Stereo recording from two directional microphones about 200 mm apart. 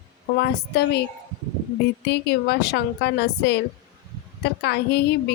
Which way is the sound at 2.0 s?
60° left (ahead or behind).